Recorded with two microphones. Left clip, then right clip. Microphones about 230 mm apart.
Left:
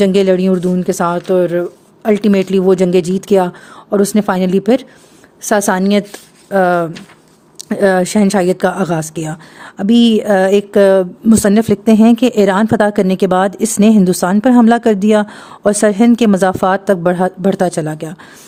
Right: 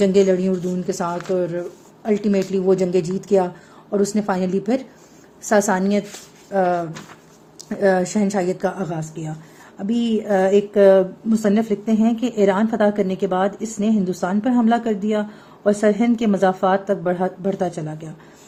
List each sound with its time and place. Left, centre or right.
0.0 s speech: left